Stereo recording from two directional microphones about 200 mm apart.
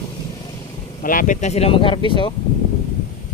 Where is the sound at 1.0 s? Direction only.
45° left (ahead or behind); by 2.1 s 25° left (ahead or behind).